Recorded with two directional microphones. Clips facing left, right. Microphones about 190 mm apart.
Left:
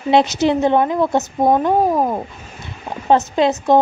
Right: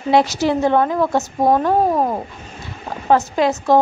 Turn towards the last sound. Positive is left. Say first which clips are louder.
# left 1 dB
turn(degrees=20)  # may be behind; listen again after turning